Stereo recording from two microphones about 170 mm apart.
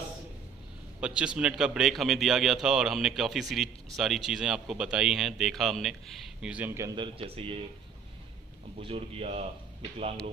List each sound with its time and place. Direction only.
1.0 s a man's voice: 5° right (ahead or behind)
7.0 s speech: 35° right (ahead or behind)
8.7 s speech: 35° right (ahead or behind)